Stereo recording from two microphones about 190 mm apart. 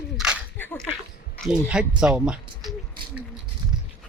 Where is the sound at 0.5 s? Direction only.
10° left (ahead or behind).